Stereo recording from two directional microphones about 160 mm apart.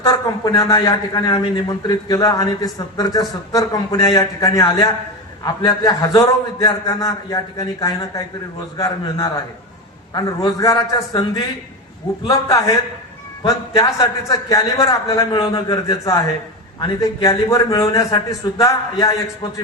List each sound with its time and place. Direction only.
0.7 s a man's voice: 25° left (ahead or behind)
2.0 s a man's voice: 20° left (ahead or behind)